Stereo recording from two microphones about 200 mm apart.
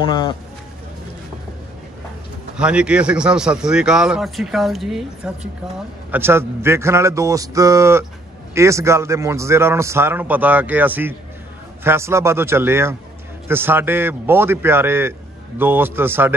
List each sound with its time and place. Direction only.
0.0 s speech: 25° left (ahead or behind)
2.5 s a man's voice: 5° right (ahead or behind)